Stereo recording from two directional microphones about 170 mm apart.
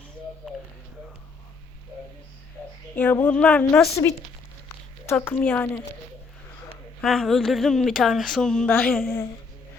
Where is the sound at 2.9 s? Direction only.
10° left (ahead or behind).